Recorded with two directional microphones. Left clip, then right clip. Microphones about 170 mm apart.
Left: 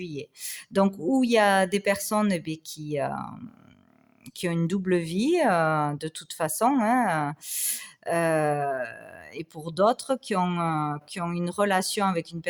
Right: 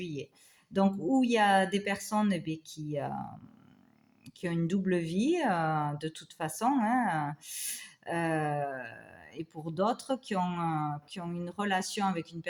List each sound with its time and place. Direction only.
0.0 s speech: 35° left (ahead or behind)
4.4 s speech: 45° left (ahead or behind)